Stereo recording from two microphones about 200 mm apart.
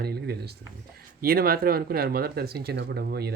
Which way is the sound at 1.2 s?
50° right (ahead or behind).